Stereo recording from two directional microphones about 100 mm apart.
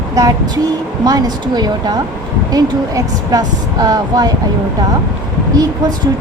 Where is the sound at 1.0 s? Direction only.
40° right (ahead or behind).